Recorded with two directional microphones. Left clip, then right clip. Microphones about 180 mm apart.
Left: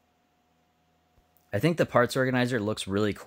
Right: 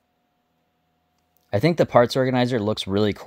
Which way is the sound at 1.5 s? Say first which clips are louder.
Right 6 dB; 30° right (ahead or behind).